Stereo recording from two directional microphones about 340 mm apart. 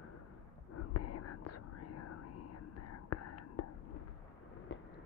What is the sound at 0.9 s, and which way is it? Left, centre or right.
Whispering, left.